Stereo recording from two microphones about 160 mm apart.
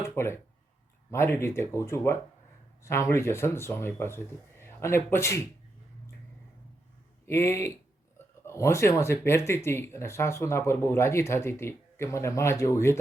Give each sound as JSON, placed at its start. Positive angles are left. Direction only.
{"t": 0.0, "sound": "a sound", "side_deg": 15}
{"t": 1.1, "sound": "speech", "side_deg": 15}
{"t": 7.3, "sound": "speech", "side_deg": 15}